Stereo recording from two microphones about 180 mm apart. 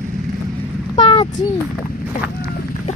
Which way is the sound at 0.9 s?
30° left (ahead or behind).